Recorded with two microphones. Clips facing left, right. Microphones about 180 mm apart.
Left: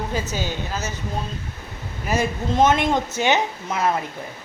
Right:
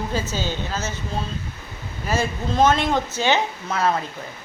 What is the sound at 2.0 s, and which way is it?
Speech, 20° left (ahead or behind).